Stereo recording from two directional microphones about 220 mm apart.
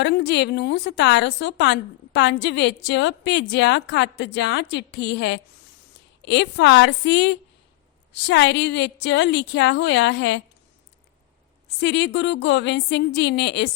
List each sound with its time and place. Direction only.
0.0 s a woman's voice: 50° left (ahead or behind)
11.8 s a woman's voice: 55° left (ahead or behind)